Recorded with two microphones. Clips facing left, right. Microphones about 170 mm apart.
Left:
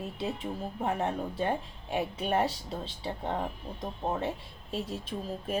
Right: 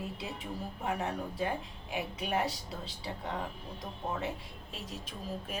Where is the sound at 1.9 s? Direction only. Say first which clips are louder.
Left 5 dB; 30° left (ahead or behind).